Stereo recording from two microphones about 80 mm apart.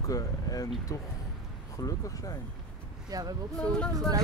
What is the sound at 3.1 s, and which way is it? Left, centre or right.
Speech, right.